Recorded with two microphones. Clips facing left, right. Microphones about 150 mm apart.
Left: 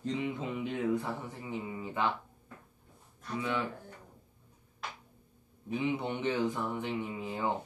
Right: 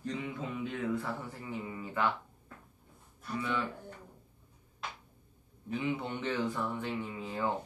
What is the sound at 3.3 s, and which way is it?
Speech, 15° left (ahead or behind).